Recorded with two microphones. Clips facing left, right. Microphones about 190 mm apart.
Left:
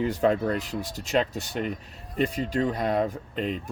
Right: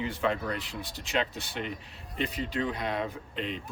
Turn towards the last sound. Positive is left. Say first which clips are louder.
# left 5 dB
turn(degrees=45)  # may be behind; listen again after turning